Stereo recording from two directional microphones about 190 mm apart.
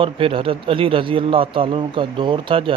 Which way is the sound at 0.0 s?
30° right (ahead or behind).